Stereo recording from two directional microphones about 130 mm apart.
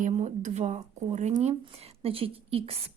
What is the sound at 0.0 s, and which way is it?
Speech, 60° right (ahead or behind).